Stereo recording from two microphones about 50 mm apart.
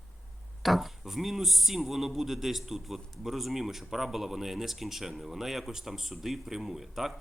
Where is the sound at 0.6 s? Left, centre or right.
Centre.